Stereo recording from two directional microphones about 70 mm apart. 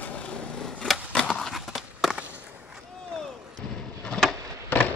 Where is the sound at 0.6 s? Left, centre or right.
Centre.